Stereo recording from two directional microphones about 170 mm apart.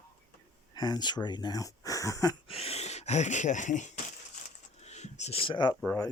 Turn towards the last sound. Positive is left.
turn(degrees=20)  # may be behind; listen again after turning